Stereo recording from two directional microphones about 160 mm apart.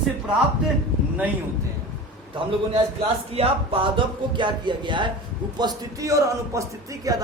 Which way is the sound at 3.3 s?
35° right (ahead or behind).